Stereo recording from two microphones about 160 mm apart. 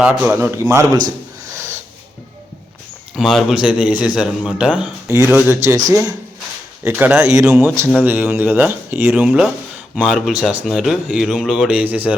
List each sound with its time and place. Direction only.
0.0 s speech: 10° right (ahead or behind)
3.2 s speech: centre (ahead or behind)
5.0 s speech: 15° right (ahead or behind)
6.8 s speech: 10° right (ahead or behind)